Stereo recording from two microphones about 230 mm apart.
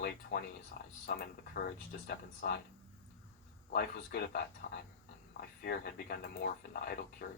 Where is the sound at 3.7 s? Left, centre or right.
Left.